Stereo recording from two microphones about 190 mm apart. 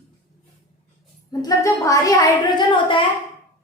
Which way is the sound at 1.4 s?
15° left (ahead or behind).